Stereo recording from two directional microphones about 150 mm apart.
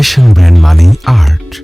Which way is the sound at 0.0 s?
Centre (ahead or behind).